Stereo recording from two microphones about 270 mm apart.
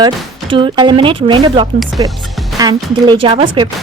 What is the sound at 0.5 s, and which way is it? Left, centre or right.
A woman's voice, centre.